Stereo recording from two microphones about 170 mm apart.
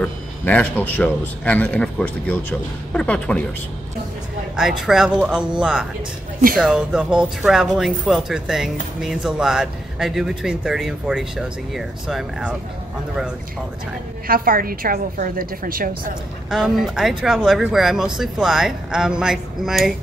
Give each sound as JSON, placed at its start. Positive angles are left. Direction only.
{"t": 0.0, "sound": "a man's voice", "side_deg": 10}
{"t": 4.6, "sound": "speech", "side_deg": -5}
{"t": 14.2, "sound": "a woman's voice", "side_deg": -55}
{"t": 16.4, "sound": "speech", "side_deg": -5}